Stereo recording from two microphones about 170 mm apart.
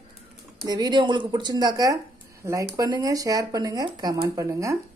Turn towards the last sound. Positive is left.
turn(degrees=-20)  # may be behind; listen again after turning